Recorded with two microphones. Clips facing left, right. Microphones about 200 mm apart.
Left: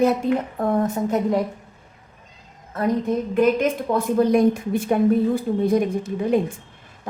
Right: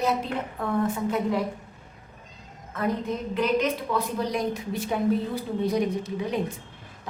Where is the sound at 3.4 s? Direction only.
50° left (ahead or behind).